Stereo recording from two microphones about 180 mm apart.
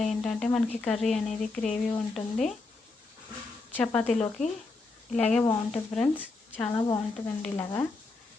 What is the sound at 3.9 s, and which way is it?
A woman's voice, 5° left (ahead or behind).